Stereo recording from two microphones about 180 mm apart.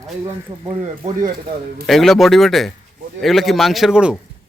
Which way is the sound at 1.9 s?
Centre (ahead or behind).